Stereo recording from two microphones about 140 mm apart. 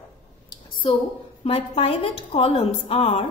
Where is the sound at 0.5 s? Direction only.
35° left (ahead or behind).